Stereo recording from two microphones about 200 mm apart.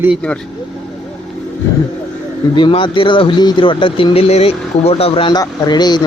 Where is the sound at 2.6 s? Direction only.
25° left (ahead or behind).